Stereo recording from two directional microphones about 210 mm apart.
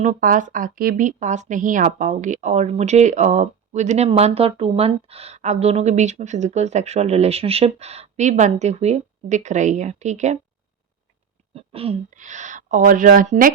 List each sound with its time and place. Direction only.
0.0 s speech: 40° right (ahead or behind)
11.5 s speech: 25° right (ahead or behind)